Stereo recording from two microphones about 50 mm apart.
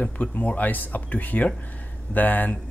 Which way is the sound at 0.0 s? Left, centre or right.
Left.